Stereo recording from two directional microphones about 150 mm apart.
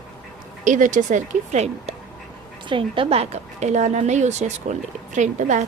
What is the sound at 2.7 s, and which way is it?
A woman's voice, 35° right (ahead or behind).